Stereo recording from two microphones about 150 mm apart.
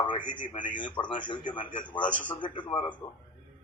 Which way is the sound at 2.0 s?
10° left (ahead or behind).